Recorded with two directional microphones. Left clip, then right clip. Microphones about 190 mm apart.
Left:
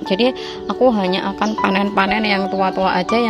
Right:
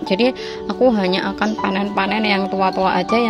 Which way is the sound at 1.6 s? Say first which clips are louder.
Left 5 dB; 15° left (ahead or behind).